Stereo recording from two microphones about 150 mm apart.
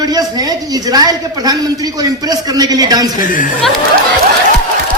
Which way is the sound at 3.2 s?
60° left (ahead or behind).